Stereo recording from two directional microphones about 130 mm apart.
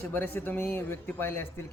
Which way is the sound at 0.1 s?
15° left (ahead or behind).